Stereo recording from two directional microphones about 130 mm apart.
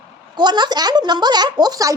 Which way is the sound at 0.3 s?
35° right (ahead or behind).